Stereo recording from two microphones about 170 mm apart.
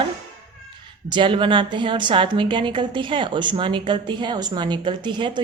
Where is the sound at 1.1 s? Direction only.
30° right (ahead or behind).